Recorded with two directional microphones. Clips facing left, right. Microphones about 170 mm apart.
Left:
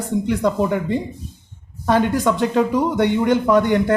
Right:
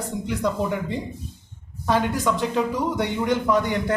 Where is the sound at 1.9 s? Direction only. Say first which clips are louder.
Left 5 dB; 60° left (ahead or behind).